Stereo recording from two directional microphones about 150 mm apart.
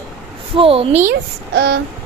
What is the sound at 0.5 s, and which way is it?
Speech, 40° right (ahead or behind).